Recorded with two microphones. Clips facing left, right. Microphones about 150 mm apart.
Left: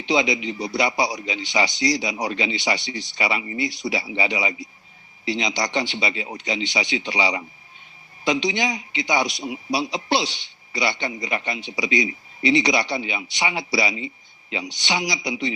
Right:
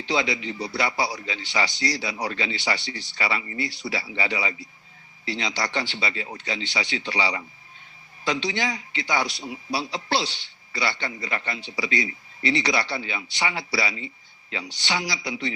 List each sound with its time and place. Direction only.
0.0 s a man's voice: 15° left (ahead or behind)